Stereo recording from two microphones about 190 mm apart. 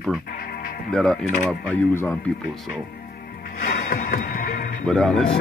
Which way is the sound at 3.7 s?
50° left (ahead or behind).